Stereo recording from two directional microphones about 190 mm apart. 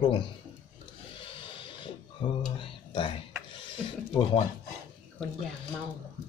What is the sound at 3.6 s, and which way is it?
Speech, 25° left (ahead or behind).